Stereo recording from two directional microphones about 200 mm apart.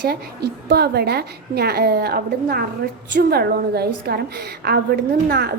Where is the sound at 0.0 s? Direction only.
55° right (ahead or behind).